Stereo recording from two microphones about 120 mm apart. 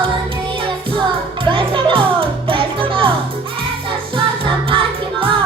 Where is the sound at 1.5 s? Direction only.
45° right (ahead or behind).